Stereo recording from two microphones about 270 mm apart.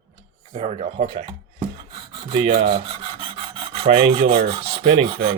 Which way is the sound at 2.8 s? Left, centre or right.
Centre.